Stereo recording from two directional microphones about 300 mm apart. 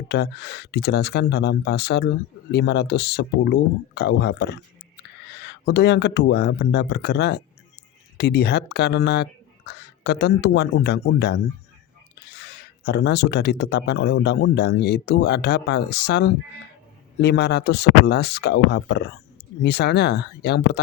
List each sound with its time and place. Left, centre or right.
0.1 s speech: left